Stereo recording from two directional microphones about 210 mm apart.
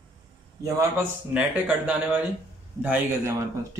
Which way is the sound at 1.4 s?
5° right (ahead or behind).